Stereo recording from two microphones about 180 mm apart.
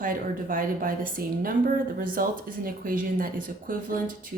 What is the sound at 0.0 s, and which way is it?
A woman's voice, 50° right (ahead or behind).